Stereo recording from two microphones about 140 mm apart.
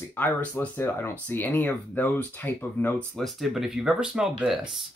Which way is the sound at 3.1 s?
Centre (ahead or behind).